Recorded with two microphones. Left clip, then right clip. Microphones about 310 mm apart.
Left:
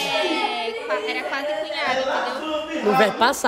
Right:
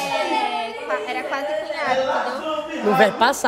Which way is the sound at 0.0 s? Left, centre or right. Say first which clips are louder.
Even; centre.